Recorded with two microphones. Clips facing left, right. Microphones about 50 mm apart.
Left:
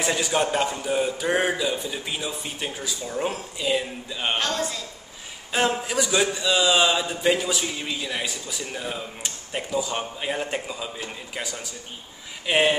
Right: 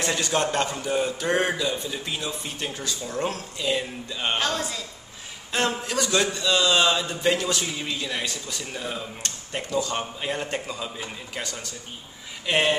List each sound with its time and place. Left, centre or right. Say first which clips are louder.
0.0 s a man's voice: left 1 dB; centre
5.5 s a man's voice: left 2 dB; centre